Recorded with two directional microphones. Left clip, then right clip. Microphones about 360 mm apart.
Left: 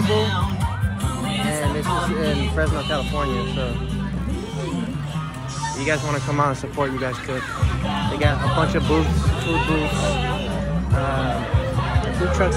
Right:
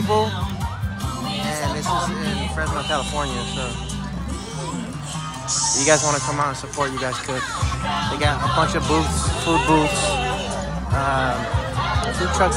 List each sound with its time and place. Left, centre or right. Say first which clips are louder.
0.0 s music: right 2 dB; centre
2.0 s speech: left 2 dB; right
2.5 s speech: even; centre
5.8 s speech: right 5 dB; centre
8.5 s speech: even; centre
9.5 s speech: right 5 dB; right
12.0 s speech: right 2 dB; centre